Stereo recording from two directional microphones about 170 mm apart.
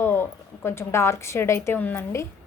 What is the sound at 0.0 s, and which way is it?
A woman's voice, 15° left (ahead or behind).